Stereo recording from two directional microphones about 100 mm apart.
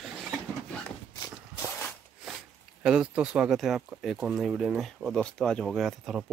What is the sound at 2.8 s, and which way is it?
Speech, 10° right (ahead or behind).